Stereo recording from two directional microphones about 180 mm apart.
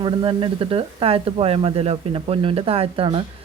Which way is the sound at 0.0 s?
25° right (ahead or behind).